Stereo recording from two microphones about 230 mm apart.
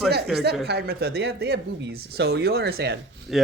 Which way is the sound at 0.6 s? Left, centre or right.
Right.